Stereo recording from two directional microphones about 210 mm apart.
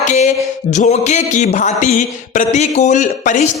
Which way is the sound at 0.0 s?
35° left (ahead or behind).